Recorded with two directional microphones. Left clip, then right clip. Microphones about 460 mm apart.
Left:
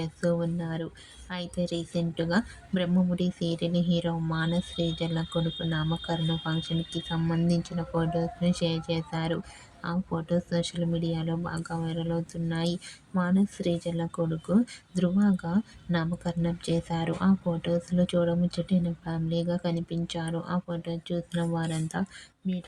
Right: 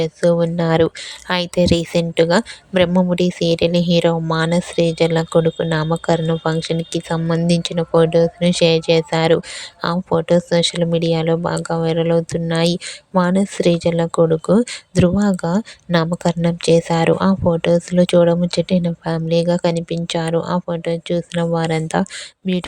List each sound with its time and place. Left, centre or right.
0.0 s speech: centre